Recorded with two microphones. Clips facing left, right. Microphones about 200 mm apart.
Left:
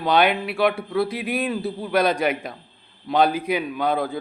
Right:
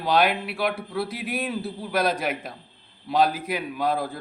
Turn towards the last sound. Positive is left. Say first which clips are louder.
# left 3 dB
turn(degrees=0)  # may be behind; listen again after turning